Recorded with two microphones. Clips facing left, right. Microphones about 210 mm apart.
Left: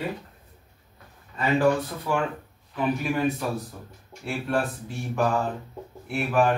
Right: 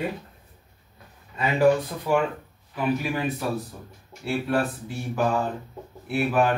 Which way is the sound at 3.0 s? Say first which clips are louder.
Left 2 dB; centre (ahead or behind).